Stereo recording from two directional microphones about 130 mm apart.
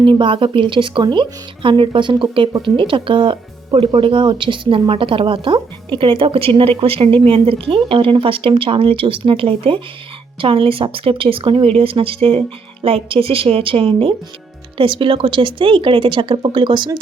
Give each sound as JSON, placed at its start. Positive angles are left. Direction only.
{"t": 0.0, "sound": "a woman's voice", "side_deg": -40}